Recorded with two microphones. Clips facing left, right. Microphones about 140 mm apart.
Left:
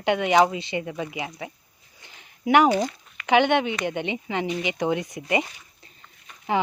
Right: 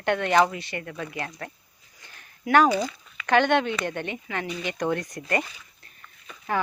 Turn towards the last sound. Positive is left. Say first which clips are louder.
# left 3 dB
turn(degrees=20)  # may be behind; listen again after turning